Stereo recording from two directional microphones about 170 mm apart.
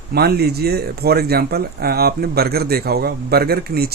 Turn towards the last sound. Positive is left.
turn(degrees=-65)  # may be behind; listen again after turning